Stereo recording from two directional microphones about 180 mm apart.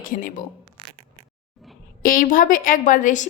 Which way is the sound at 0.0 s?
45° left (ahead or behind).